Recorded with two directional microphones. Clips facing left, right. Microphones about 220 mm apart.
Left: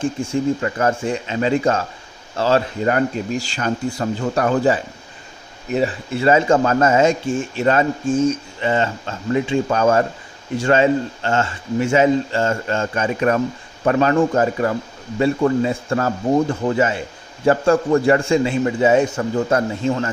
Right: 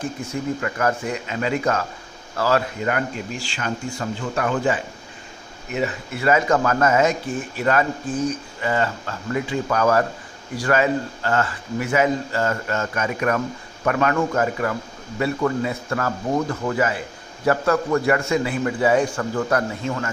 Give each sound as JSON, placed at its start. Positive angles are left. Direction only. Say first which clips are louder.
{"t": 0.0, "sound": "speech", "louder": "left 7 dB", "side_deg": 30}